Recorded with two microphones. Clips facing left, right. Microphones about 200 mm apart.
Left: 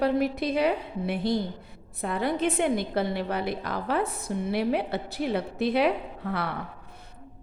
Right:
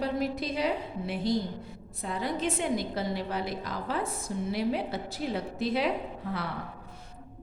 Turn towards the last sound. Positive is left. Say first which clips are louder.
# left 3 dB
turn(degrees=65)  # may be behind; listen again after turning